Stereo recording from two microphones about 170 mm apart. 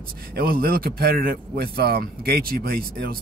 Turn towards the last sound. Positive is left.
turn(degrees=-65)  # may be behind; listen again after turning